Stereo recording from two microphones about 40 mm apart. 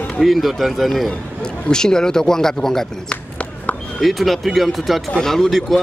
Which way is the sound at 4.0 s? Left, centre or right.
Centre.